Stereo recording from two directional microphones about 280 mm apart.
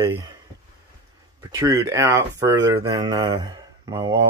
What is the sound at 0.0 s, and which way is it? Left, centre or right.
Speech, centre.